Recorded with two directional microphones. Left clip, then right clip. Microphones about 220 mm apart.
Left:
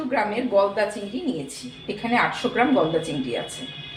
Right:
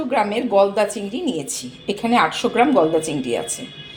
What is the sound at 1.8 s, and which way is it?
Speech, 40° right (ahead or behind).